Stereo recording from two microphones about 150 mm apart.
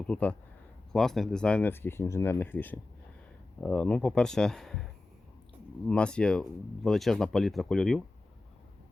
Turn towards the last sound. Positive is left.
turn(degrees=5)  # may be behind; listen again after turning